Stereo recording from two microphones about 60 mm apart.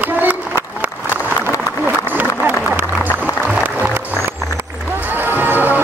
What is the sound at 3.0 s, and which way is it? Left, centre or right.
Music, right.